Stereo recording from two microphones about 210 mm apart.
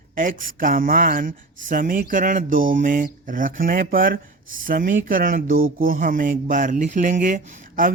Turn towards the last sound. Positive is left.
turn(degrees=-40)  # may be behind; listen again after turning